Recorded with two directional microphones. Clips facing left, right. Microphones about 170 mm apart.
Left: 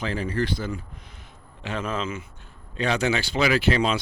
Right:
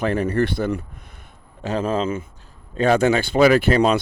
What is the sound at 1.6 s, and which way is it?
Speech, 35° right (ahead or behind).